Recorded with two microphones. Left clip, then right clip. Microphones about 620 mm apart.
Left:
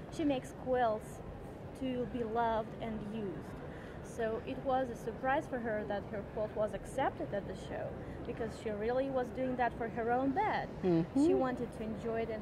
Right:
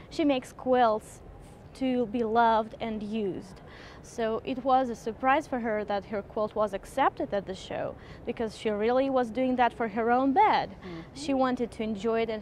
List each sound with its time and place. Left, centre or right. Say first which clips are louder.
0.2 s speech: right 8 dB; right
4.2 s a woman's voice: right 7 dB; right